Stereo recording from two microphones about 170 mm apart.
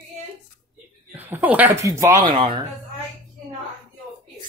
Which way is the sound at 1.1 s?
10° right (ahead or behind).